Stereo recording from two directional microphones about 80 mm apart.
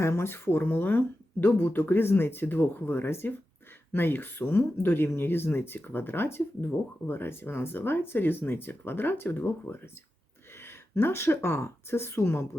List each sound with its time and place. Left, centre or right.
0.0 s speech: left